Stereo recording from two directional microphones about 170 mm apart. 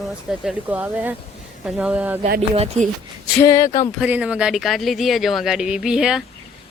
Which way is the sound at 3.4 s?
20° left (ahead or behind).